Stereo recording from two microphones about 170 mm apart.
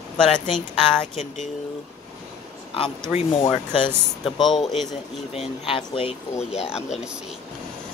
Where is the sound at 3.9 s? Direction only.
Centre (ahead or behind).